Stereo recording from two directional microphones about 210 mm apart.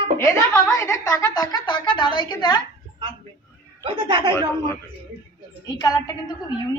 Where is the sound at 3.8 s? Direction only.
25° right (ahead or behind).